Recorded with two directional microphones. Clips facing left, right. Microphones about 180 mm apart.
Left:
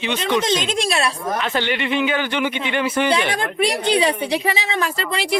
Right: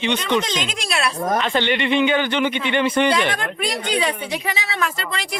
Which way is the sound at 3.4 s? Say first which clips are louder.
Left 5 dB; 30° left (ahead or behind).